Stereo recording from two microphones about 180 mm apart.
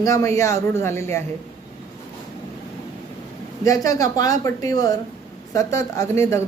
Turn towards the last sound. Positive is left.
turn(degrees=15)  # may be behind; listen again after turning